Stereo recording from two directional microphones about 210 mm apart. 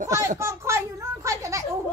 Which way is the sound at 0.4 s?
15° right (ahead or behind).